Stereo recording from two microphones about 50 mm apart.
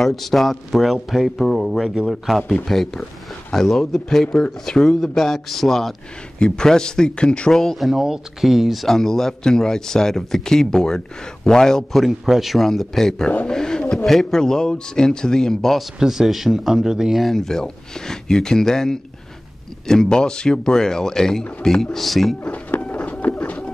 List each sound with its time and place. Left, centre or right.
0.0 s speech: centre
7.5 s speech: centre
8.8 s speech: centre
12.0 s speech: centre
16.0 s speech: centre
22.8 s a sound: left